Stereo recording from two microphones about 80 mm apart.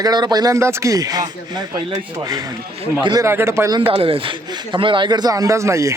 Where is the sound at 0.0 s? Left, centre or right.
Right.